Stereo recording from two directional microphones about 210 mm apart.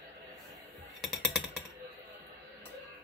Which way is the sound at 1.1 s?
Centre (ahead or behind).